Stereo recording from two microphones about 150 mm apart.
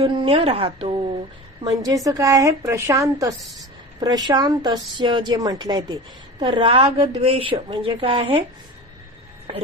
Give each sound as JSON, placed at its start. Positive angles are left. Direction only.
{"t": 0.0, "sound": "a woman's voice", "side_deg": -40}
{"t": 1.6, "sound": "a woman's voice", "side_deg": -25}
{"t": 3.3, "sound": "a woman's voice", "side_deg": 0}
{"t": 4.0, "sound": "a woman's voice", "side_deg": -25}
{"t": 9.5, "sound": "a woman's voice", "side_deg": -35}